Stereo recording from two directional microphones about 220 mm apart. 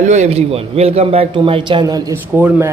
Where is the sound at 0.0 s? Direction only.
35° right (ahead or behind).